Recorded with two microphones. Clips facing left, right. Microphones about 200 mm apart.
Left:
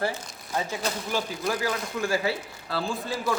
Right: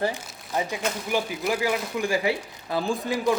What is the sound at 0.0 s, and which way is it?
Speech, 15° right (ahead or behind).